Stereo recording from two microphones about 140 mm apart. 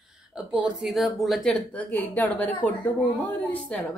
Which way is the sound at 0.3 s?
5° right (ahead or behind).